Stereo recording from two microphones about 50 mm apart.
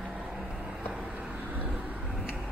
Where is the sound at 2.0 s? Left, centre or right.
Centre.